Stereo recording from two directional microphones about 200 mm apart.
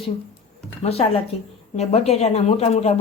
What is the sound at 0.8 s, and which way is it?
A woman's voice, 30° left (ahead or behind).